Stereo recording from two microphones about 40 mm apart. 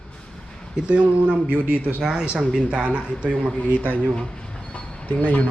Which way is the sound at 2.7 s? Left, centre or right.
Right.